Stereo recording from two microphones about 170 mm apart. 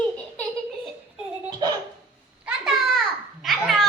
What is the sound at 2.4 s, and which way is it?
Babbling, 5° right (ahead or behind).